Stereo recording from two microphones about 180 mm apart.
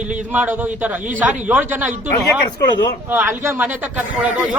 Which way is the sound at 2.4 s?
25° left (ahead or behind).